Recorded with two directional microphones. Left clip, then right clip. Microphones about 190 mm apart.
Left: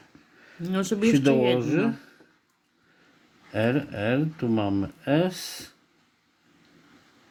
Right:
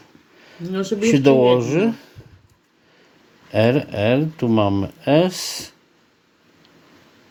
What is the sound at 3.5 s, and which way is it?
Speech, 20° right (ahead or behind).